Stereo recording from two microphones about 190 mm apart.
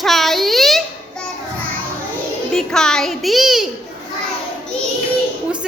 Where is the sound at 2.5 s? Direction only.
5° left (ahead or behind).